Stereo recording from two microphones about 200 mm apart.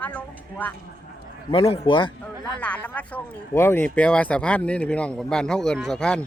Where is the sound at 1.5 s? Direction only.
25° left (ahead or behind).